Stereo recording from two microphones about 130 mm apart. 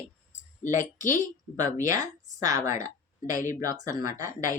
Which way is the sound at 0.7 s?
80° left.